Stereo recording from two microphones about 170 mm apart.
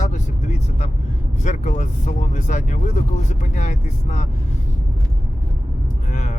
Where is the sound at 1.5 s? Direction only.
45° left (ahead or behind).